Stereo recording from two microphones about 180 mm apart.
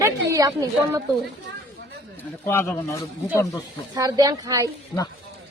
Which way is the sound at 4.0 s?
20° right (ahead or behind).